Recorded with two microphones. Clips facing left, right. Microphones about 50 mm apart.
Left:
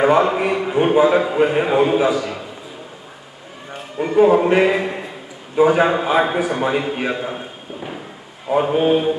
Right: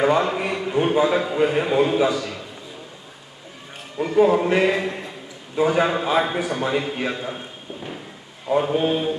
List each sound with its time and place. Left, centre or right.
0.0 s a man's voice: centre
3.7 s a man's voice: centre
8.5 s mantra: centre